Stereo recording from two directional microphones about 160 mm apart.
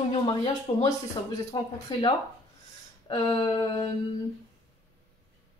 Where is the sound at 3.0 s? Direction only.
25° left (ahead or behind).